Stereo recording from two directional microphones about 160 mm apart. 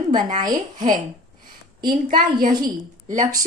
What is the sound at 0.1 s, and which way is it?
Speech, 50° right (ahead or behind).